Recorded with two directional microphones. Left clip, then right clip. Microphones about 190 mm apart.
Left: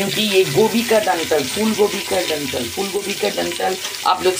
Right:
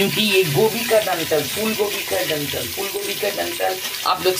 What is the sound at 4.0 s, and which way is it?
Stir, 10° left (ahead or behind).